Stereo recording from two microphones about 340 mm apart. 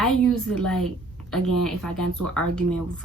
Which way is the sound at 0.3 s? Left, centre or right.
Centre.